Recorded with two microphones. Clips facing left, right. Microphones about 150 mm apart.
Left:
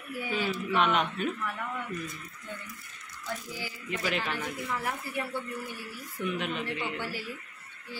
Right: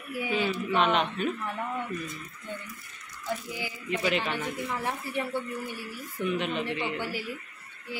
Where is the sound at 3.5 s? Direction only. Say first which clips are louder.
Right 3 dB; 15° right (ahead or behind).